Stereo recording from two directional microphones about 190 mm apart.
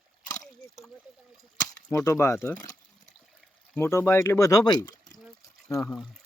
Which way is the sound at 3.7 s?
15° left (ahead or behind).